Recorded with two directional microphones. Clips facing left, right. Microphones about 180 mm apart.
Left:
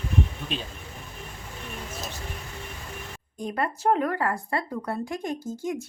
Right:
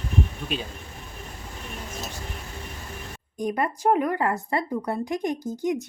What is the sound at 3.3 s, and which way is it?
Speech, 15° right (ahead or behind).